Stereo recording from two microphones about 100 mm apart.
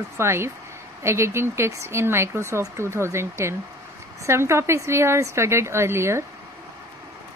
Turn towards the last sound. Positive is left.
turn(degrees=-25)  # may be behind; listen again after turning